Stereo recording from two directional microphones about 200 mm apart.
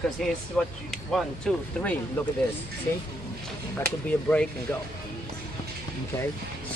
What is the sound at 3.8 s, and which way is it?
Speech, 5° left (ahead or behind).